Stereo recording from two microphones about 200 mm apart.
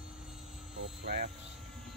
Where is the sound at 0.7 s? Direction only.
50° right (ahead or behind).